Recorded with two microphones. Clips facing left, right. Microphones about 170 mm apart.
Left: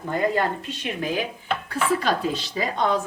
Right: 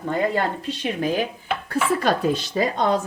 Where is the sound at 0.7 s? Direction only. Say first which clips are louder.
Right 3 dB; 40° right (ahead or behind).